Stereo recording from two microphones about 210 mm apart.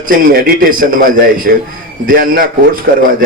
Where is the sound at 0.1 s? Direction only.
45° right (ahead or behind).